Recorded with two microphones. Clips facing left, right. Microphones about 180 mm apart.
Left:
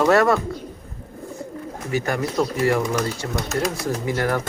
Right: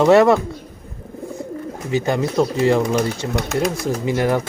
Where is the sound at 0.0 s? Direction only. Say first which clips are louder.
Right 5 dB; 20° right (ahead or behind).